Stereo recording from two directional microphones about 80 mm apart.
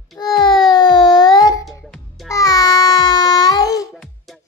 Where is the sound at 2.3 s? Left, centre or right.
Left.